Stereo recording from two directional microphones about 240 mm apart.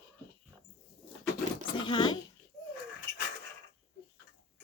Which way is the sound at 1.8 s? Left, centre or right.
Centre.